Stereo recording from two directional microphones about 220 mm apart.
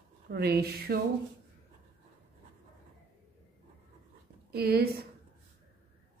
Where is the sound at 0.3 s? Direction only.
45° right (ahead or behind).